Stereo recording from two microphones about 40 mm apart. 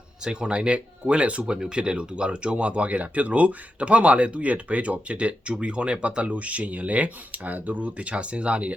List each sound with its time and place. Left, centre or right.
0.3 s speech: right
1.5 s speech: right